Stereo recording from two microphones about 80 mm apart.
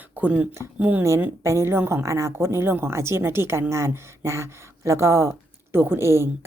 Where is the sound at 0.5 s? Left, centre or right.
Right.